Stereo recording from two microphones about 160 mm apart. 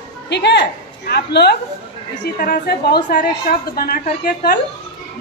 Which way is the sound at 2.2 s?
70° left (ahead or behind).